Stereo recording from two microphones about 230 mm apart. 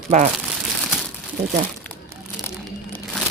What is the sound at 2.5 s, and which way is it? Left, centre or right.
Crumpling, centre.